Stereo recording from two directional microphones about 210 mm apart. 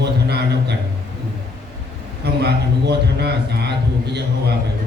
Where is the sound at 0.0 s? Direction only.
50° right (ahead or behind).